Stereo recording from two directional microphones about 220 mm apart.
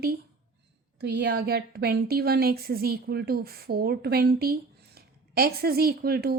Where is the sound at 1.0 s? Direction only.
45° right (ahead or behind).